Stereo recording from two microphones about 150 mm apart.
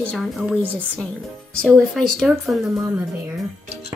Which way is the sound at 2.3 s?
5° right (ahead or behind).